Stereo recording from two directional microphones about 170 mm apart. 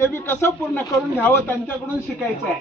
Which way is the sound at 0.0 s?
15° left (ahead or behind).